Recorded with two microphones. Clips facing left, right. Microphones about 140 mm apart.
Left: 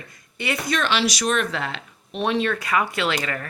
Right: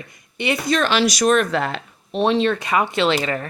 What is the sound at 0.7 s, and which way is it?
Speech, 45° right (ahead or behind).